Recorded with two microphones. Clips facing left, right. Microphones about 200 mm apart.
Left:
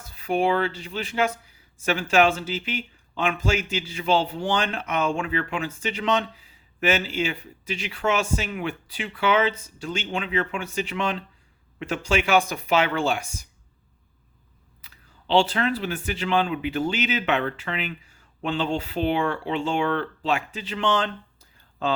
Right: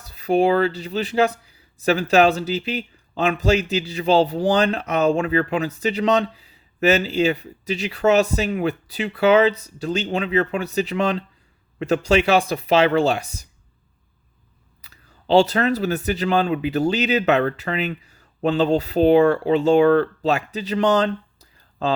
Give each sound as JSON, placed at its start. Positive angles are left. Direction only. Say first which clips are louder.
{"t": 0.0, "sound": "speech", "louder": "right 5 dB", "side_deg": -35}
{"t": 14.8, "sound": "speech", "louder": "right 2 dB", "side_deg": -40}